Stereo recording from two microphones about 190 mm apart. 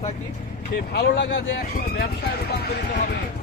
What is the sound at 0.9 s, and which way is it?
Speech, 60° left (ahead or behind).